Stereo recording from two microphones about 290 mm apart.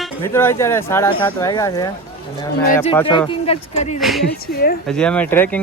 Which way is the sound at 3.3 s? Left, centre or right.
Centre.